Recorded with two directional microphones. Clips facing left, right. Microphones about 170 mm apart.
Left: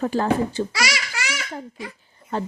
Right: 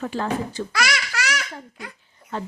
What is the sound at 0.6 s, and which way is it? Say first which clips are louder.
Speech: left 5 dB; 30° left (ahead or behind).